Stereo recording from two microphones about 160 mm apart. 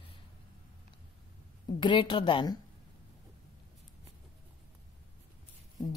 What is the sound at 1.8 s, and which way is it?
Speech, 30° left (ahead or behind).